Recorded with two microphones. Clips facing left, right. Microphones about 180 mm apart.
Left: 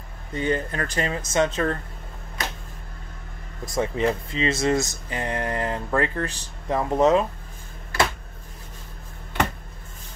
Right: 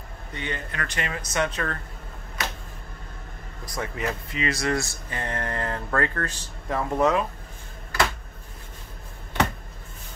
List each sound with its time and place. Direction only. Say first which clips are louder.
0.3 s speech: left 9 dB; 35° left (ahead or behind)
3.6 s speech: left 7 dB; 25° left (ahead or behind)